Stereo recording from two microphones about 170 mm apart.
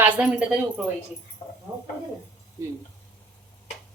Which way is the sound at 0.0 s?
5° right (ahead or behind).